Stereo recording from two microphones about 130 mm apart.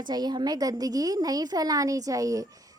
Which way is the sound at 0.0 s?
30° right (ahead or behind).